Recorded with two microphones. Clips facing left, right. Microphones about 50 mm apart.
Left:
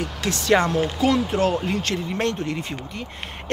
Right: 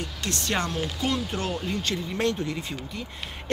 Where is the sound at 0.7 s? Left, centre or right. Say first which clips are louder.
Left 8 dB; left.